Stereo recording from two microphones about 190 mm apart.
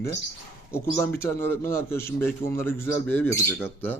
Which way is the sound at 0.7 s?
15° left (ahead or behind).